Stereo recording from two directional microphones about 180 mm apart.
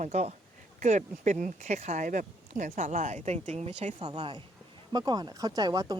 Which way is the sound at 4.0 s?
25° right (ahead or behind).